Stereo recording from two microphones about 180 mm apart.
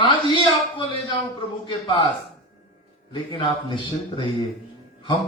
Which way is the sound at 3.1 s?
25° left (ahead or behind).